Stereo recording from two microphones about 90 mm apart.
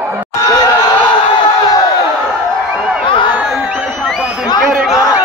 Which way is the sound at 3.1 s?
65° left (ahead or behind).